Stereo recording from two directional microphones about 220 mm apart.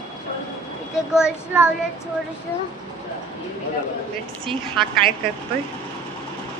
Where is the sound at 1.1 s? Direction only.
5° right (ahead or behind).